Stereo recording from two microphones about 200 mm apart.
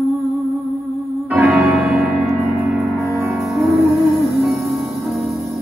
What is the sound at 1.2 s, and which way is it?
Music, centre (ahead or behind).